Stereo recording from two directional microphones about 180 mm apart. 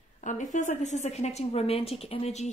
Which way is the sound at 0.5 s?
40° left (ahead or behind).